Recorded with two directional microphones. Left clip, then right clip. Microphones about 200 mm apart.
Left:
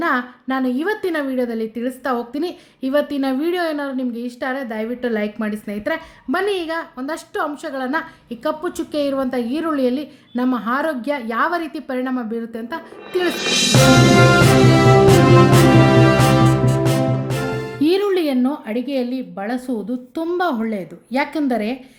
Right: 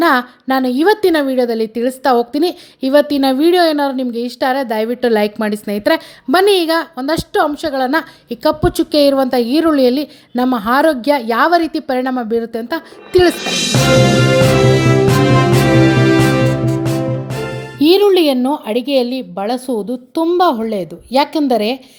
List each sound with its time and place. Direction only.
0.0 s a woman's voice: 40° right (ahead or behind)
13.3 s music: centre (ahead or behind)
16.8 s music: centre (ahead or behind)
17.7 s a woman's voice: 30° right (ahead or behind)